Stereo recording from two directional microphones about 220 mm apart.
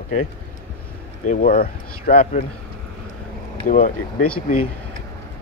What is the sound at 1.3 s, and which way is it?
Speech, 40° left (ahead or behind).